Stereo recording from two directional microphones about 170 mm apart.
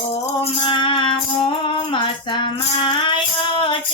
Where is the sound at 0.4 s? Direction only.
30° left (ahead or behind).